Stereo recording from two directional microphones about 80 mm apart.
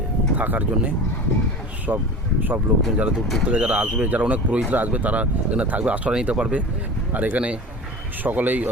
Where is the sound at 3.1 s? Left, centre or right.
Centre.